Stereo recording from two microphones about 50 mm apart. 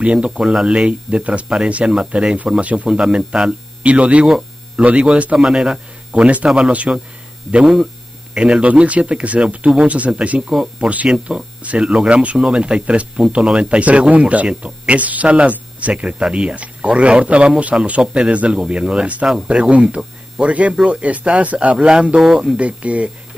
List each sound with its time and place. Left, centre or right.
0.0 s speech: centre
2.9 s speech: centre
4.4 s hum: right
5.0 s speech: right
5.4 s speech: centre; by 10.4 s right
10.5 s speech: centre
21.7 s speech: centre